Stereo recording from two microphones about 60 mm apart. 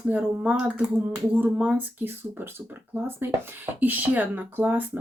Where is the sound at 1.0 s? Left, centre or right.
Right.